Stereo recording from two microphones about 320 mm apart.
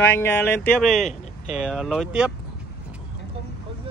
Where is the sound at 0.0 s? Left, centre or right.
Centre.